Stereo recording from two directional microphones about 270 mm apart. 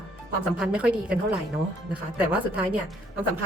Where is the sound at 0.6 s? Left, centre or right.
Centre.